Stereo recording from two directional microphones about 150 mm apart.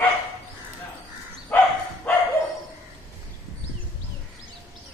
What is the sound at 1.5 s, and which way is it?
Bow-wow, 10° left (ahead or behind).